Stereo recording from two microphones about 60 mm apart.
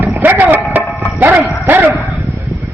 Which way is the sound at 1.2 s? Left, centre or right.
Right.